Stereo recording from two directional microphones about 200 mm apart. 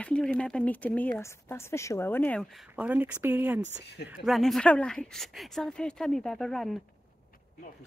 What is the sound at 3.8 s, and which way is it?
Speech, 55° left (ahead or behind).